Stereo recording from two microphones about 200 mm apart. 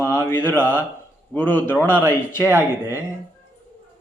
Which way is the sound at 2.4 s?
10° right (ahead or behind).